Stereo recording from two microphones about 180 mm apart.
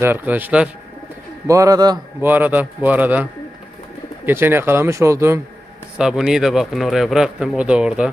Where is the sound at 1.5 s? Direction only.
20° right (ahead or behind).